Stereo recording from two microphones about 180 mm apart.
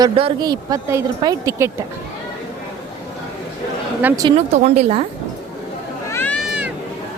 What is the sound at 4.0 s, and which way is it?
Speech, 10° right (ahead or behind).